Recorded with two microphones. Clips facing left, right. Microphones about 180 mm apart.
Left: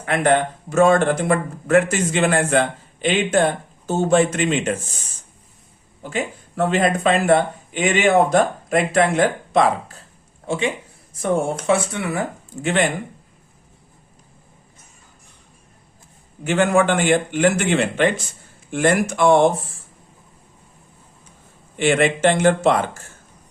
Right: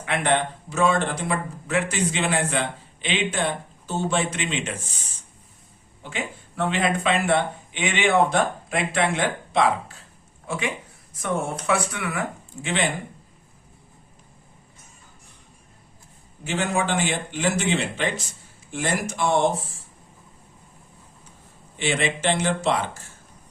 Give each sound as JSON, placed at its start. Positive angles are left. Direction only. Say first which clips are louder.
{"t": 0.0, "sound": "speech", "louder": "left 5 dB", "side_deg": 45}
{"t": 6.0, "sound": "speech", "louder": "left 6 dB", "side_deg": 40}
{"t": 10.4, "sound": "speech", "louder": "left 6 dB", "side_deg": 25}
{"t": 16.4, "sound": "a man's voice", "louder": "left 8 dB", "side_deg": 55}
{"t": 21.8, "sound": "speech", "louder": "left 8 dB", "side_deg": 55}